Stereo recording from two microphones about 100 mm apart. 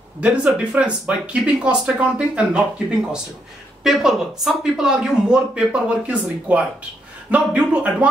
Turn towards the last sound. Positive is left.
turn(degrees=-15)  # may be behind; listen again after turning